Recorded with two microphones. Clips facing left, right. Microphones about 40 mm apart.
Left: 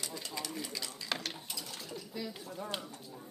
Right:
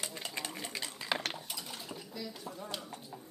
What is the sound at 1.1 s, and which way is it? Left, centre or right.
Mechanisms, centre.